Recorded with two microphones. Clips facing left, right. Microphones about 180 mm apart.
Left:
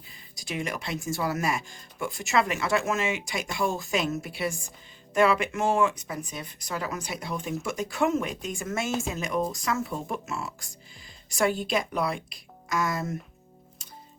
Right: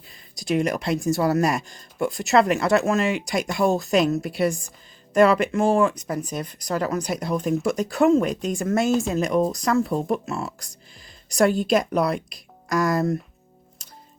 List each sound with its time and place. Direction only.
0.3 s speech: 40° right (ahead or behind)